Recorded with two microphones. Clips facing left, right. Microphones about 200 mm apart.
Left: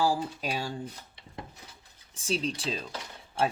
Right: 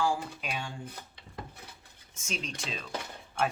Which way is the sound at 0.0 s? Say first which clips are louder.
Left 3 dB; 35° left (ahead or behind).